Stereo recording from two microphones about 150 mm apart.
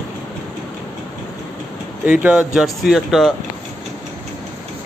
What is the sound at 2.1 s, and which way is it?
Speech, 5° right (ahead or behind).